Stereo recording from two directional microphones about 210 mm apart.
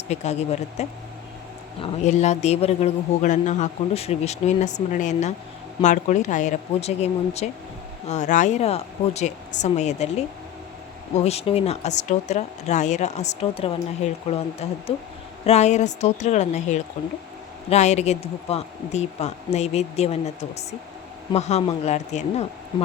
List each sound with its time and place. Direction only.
0.1 s speech: 30° left (ahead or behind)
11.2 s speech: 30° left (ahead or behind)